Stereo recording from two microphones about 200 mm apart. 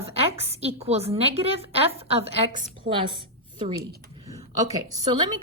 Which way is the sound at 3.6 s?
25° right (ahead or behind).